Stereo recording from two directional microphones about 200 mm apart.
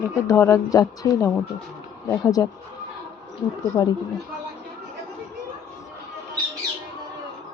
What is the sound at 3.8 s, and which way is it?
Speech, 20° left (ahead or behind).